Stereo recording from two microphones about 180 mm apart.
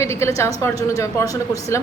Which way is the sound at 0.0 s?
15° left (ahead or behind).